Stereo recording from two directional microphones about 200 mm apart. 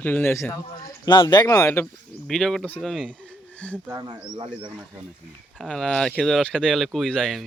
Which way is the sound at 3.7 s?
10° right (ahead or behind).